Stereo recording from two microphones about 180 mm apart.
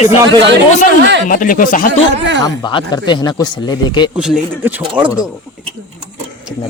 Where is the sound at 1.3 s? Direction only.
50° left (ahead or behind).